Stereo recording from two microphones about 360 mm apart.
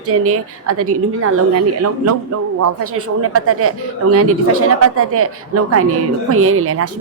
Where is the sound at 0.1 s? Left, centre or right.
Right.